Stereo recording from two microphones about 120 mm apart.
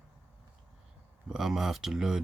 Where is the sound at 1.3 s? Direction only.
5° right (ahead or behind).